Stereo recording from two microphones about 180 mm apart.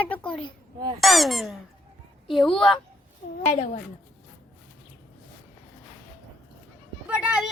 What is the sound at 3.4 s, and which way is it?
Speech, 40° left (ahead or behind).